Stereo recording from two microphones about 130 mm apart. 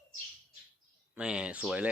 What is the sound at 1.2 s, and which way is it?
Speech, 5° right (ahead or behind).